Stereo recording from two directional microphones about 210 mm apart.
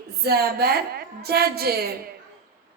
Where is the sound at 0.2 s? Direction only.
50° right (ahead or behind).